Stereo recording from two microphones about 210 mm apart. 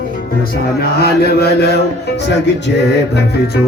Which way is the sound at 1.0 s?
50° left (ahead or behind).